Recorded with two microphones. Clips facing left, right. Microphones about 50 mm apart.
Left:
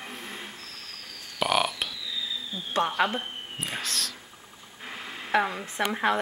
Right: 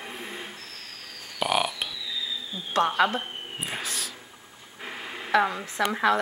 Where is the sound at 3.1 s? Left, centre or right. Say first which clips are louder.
Right 1 dB; centre.